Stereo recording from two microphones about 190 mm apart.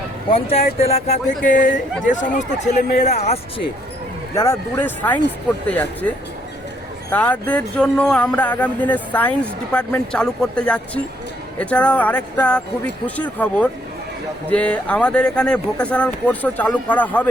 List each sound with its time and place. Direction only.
0.3 s speech: 30° left (ahead or behind)
1.5 s speech: 45° left (ahead or behind)
4.4 s speech: 10° left (ahead or behind)
7.1 s speech: 10° left (ahead or behind)